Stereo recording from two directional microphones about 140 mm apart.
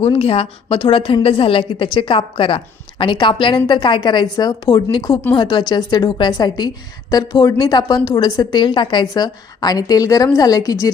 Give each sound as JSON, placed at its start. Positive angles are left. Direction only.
{"t": 0.0, "sound": "a woman's voice", "side_deg": 45}